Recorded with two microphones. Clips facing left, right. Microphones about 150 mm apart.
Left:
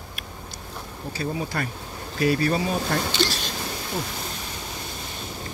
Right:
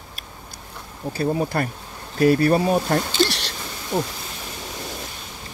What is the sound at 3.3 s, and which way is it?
Speech, 75° right (ahead or behind).